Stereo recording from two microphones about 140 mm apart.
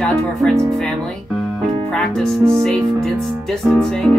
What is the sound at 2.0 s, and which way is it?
Speech, 5° left (ahead or behind).